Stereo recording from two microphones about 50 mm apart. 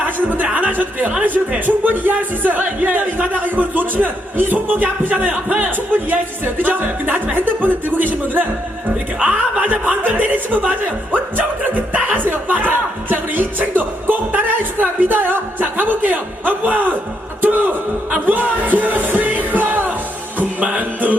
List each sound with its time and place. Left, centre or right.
0.0 s music: right
0.5 s speech: right
17.4 s music: right